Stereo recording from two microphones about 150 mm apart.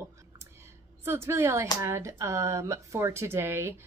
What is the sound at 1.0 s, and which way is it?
Speech, 15° right (ahead or behind).